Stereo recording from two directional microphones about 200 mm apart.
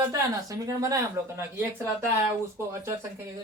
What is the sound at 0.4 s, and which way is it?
Speech, 15° right (ahead or behind).